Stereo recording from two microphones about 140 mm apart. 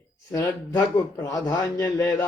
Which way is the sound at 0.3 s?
25° left (ahead or behind).